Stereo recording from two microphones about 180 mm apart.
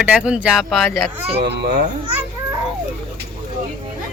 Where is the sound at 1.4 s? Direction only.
65° right (ahead or behind).